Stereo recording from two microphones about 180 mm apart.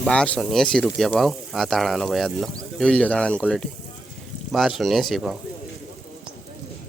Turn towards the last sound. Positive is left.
turn(degrees=0)  # may be behind; listen again after turning